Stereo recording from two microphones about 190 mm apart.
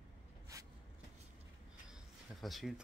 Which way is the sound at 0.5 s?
15° right (ahead or behind).